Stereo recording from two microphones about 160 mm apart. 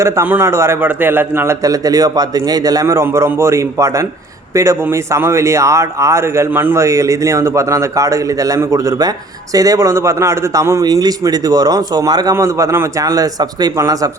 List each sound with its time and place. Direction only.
0.0 s a man's voice: 15° right (ahead or behind)